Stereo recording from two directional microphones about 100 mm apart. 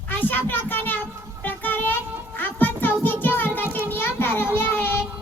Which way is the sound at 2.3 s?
20° left (ahead or behind).